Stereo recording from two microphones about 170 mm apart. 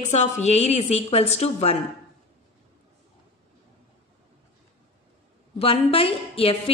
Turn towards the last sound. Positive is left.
turn(degrees=35)  # may be behind; listen again after turning